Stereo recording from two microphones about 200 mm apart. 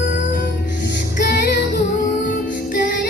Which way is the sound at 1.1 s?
50° left (ahead or behind).